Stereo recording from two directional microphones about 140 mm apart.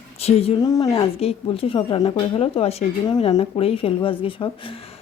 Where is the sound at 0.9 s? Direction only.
45° left (ahead or behind).